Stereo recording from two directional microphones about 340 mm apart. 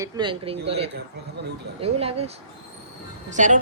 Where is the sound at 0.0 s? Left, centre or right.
Centre.